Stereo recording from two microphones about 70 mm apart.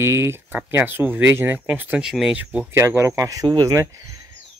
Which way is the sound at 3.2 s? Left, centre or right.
Right.